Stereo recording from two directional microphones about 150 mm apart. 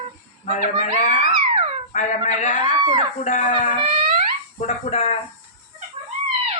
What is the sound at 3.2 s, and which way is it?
Speech, 55° left (ahead or behind).